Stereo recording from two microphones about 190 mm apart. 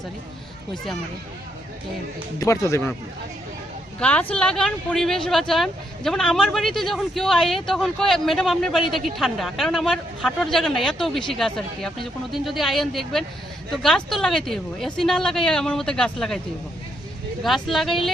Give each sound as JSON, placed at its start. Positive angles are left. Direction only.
{"t": 2.4, "sound": "speech", "side_deg": 15}
{"t": 4.0, "sound": "speech", "side_deg": 5}
{"t": 17.4, "sound": "speech", "side_deg": 0}